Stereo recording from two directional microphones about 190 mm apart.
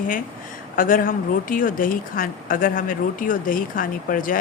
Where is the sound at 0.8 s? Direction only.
45° left (ahead or behind).